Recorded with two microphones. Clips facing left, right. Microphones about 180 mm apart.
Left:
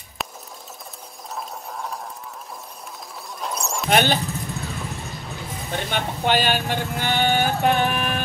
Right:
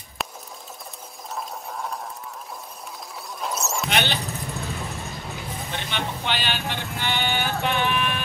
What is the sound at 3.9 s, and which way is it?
Speech, 45° left (ahead or behind).